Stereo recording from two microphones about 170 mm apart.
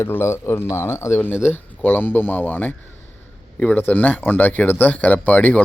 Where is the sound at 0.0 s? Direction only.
15° left (ahead or behind).